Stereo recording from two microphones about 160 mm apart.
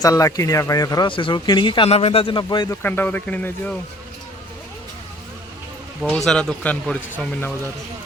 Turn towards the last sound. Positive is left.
turn(degrees=10)  # may be behind; listen again after turning